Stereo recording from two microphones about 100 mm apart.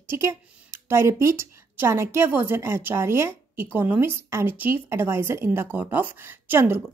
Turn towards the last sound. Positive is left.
turn(degrees=-25)  # may be behind; listen again after turning